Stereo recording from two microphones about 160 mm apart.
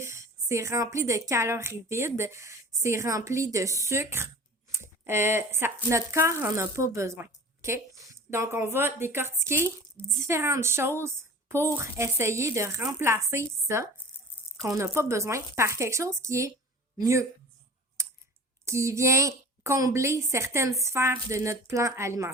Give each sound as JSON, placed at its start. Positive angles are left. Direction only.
{"t": 0.0, "sound": "a woman's voice", "side_deg": -15}
{"t": 11.0, "sound": "a sound", "side_deg": -15}
{"t": 11.7, "sound": "speech", "side_deg": -15}
{"t": 18.0, "sound": "computer keyboard", "side_deg": -20}
{"t": 18.6, "sound": "speech", "side_deg": -15}